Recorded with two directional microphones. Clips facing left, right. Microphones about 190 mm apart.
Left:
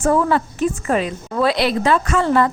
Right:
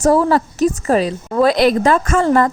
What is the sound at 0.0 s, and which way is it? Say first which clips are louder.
Speech: right 3 dB; 35° right (ahead or behind).